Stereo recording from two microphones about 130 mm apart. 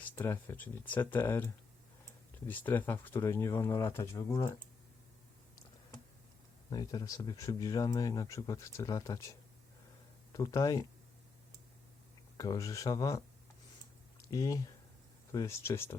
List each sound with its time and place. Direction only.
0.0 s speech: 15° left (ahead or behind)
2.5 s speech: 15° left (ahead or behind)
6.7 s speech: 30° left (ahead or behind)
10.3 s speech: 25° left (ahead or behind)
12.4 s speech: 25° left (ahead or behind)
14.3 s speech: 25° left (ahead or behind)